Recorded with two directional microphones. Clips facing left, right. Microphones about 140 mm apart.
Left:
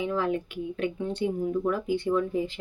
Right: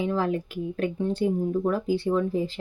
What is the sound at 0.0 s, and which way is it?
Speech, 35° right (ahead or behind).